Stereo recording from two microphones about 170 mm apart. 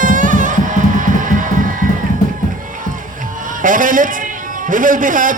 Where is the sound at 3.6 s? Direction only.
50° right (ahead or behind).